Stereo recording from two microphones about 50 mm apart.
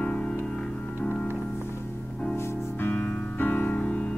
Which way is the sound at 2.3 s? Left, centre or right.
Left.